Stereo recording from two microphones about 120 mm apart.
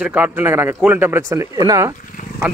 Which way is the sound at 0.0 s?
15° right (ahead or behind).